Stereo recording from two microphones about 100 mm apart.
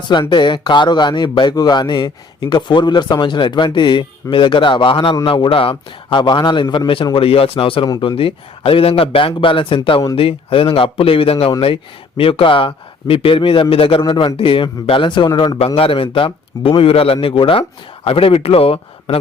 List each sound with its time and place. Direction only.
0.1 s a man's voice: 50° left (ahead or behind); by 14.0 s 70° left (ahead or behind)
14.1 s a man's voice: 60° left (ahead or behind)
15.5 s a man's voice: 80° left